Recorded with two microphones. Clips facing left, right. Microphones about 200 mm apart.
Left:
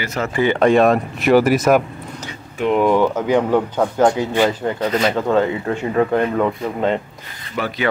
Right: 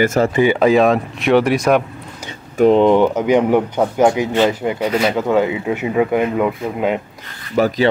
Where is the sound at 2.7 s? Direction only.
20° right (ahead or behind).